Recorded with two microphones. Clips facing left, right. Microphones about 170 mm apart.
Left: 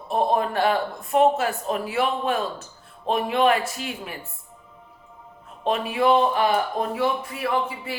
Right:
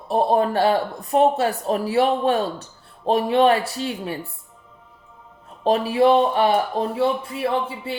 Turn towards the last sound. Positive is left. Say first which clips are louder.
# right 2 dB
turn(degrees=-30)  # may be behind; listen again after turning